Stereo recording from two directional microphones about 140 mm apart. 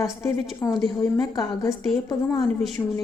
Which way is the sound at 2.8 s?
25° left (ahead or behind).